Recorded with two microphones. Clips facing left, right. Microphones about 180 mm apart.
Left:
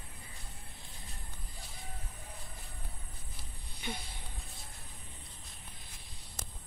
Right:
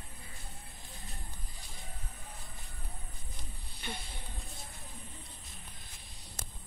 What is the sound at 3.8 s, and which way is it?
Insect, 10° left (ahead or behind).